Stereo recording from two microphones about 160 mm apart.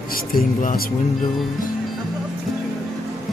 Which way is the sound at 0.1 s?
65° left (ahead or behind).